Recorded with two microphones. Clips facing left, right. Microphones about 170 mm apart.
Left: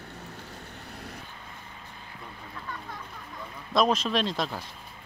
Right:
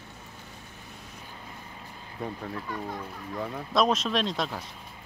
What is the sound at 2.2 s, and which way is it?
Speech, 65° right (ahead or behind).